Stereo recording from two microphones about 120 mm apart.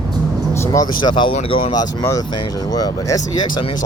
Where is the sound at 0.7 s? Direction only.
35° left (ahead or behind).